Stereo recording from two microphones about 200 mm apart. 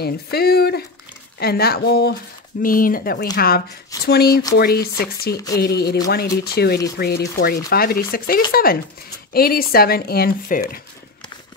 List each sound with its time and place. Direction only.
0.0 s speech: 50° left (ahead or behind)